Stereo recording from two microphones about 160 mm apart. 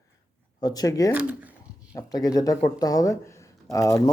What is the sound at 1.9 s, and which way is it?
Speech, 20° left (ahead or behind).